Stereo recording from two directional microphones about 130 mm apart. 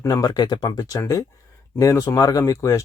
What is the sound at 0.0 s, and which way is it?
Speech, 25° left (ahead or behind).